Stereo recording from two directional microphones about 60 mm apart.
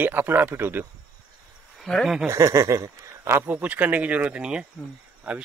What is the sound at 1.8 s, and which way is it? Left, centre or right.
Speech, centre.